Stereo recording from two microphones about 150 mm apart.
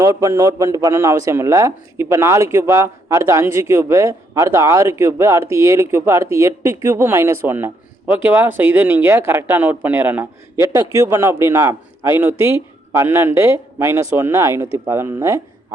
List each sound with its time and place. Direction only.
0.0 s a man's voice: 25° right (ahead or behind)